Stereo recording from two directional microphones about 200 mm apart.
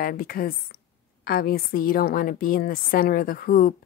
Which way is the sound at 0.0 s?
45° left (ahead or behind).